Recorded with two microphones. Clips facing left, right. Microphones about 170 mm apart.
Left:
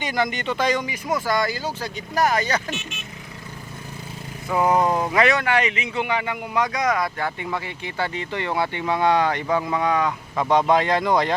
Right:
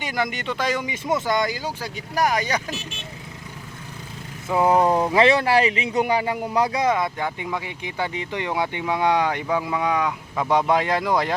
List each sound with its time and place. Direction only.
0.0 s speech: 5° right (ahead or behind)
0.9 s a man's voice: 25° right (ahead or behind)
2.7 s speech: 30° right (ahead or behind)
4.4 s vehicle: 25° right (ahead or behind)
5.1 s a man's voice: 30° right (ahead or behind); by 11.3 s 5° right (ahead or behind)